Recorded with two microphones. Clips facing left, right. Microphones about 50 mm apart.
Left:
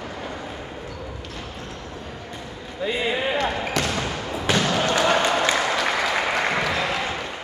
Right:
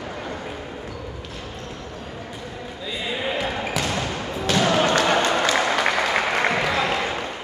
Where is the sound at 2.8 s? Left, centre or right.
Left.